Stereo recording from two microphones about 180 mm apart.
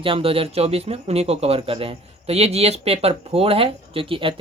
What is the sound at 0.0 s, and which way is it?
Speech, 30° right (ahead or behind).